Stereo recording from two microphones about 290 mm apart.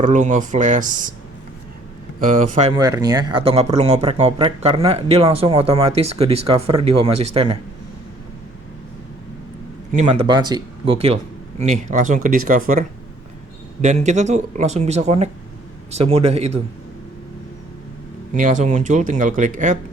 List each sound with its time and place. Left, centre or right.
0.0 s speech: right
2.2 s speech: right
2.7 s speech: centre
7.1 s speech: right
7.3 s speech: centre
9.9 s speech: right
13.8 s speech: right
18.3 s speech: right